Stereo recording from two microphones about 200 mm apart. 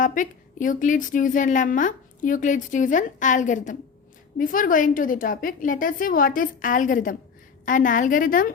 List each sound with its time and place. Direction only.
0.0 s a woman's voice: 40° left (ahead or behind)